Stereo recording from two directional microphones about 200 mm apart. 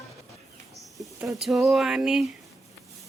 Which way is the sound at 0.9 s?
Centre (ahead or behind).